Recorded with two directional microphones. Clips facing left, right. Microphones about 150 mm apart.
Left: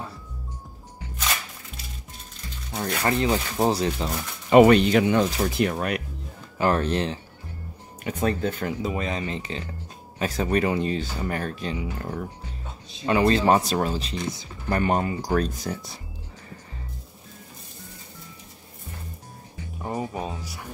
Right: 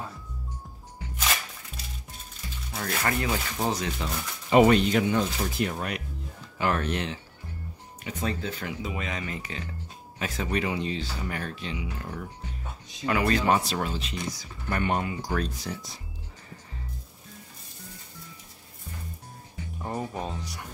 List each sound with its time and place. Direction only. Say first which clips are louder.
2.7 s speech: left 4 dB; 25° left (ahead or behind)
4.5 s speech: left 5 dB; 65° left (ahead or behind)
6.6 s speech: left 5 dB; 35° left (ahead or behind)
8.0 s speech: left 7 dB; 55° left (ahead or behind)
13.0 s speech: left 5 dB; 30° left (ahead or behind)
13.6 s speech: left 5 dB; 40° left (ahead or behind)
14.3 s speech: left 5 dB; 25° left (ahead or behind)
14.8 s speech: left 4 dB; 35° left (ahead or behind)
19.8 s speech: left 3 dB; 10° left (ahead or behind)